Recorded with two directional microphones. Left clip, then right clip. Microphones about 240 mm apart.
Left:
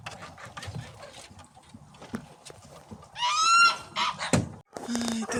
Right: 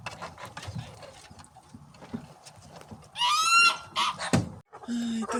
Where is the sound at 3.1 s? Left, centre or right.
Right.